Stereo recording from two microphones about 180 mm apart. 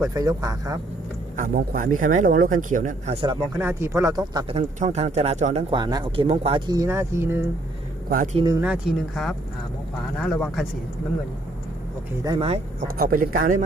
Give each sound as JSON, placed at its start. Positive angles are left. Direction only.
{"t": 0.0, "sound": "speech", "side_deg": -20}
{"t": 1.4, "sound": "speech", "side_deg": -50}
{"t": 3.6, "sound": "speech", "side_deg": -15}
{"t": 4.4, "sound": "speech", "side_deg": -30}
{"t": 5.7, "sound": "speech", "side_deg": -20}
{"t": 6.7, "sound": "speech", "side_deg": -15}
{"t": 8.1, "sound": "speech", "side_deg": -50}
{"t": 8.4, "sound": "speech", "side_deg": -20}
{"t": 8.6, "sound": "speech", "side_deg": 0}
{"t": 12.2, "sound": "speech", "side_deg": -20}
{"t": 13.0, "sound": "speech", "side_deg": -50}